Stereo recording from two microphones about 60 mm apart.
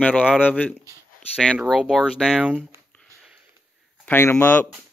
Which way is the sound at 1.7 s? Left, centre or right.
Centre.